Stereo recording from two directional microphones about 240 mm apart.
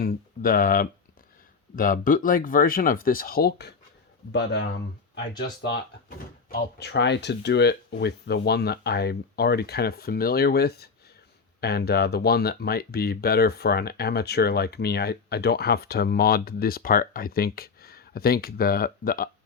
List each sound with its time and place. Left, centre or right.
0.0 s a sound: left
1.7 s speech: left
6.5 s speech: left